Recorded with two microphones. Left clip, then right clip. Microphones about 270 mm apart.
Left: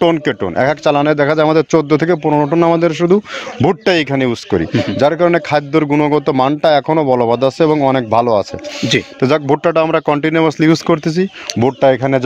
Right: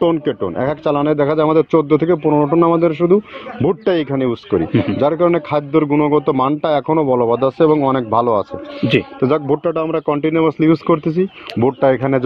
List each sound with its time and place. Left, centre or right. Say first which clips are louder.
0.0 s a man's voice: left 3 dB; left